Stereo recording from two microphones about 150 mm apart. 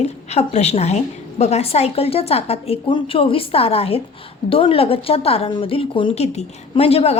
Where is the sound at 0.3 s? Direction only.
45° left (ahead or behind).